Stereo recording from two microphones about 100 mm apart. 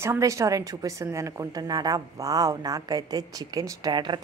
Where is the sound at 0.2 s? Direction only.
35° right (ahead or behind).